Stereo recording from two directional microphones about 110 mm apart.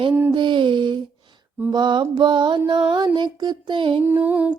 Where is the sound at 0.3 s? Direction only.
45° right (ahead or behind).